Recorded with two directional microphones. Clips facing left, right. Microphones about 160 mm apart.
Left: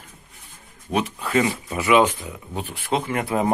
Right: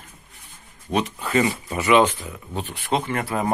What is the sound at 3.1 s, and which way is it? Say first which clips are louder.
Speech: left 2 dB; 20° left (ahead or behind).